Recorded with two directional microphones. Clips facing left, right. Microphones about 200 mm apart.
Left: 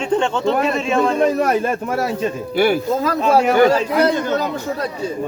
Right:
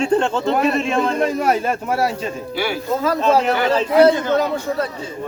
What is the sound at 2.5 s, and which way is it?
Speech, 50° left (ahead or behind).